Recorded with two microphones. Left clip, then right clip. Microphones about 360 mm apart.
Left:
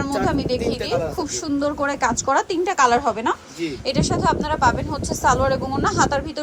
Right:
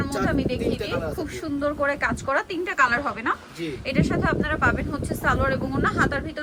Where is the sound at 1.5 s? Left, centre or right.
Centre.